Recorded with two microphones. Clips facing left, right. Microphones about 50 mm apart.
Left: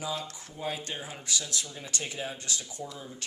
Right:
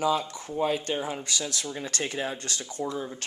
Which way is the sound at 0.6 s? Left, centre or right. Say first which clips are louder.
Right 8 dB; right.